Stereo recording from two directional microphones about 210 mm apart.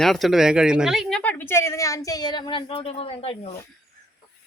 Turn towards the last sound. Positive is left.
turn(degrees=30)  # may be behind; listen again after turning